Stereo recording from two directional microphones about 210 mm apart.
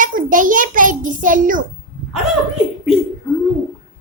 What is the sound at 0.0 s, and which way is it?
A child's voice, 40° right (ahead or behind).